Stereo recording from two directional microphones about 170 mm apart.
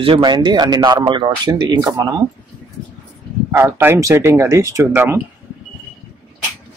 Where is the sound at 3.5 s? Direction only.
15° right (ahead or behind).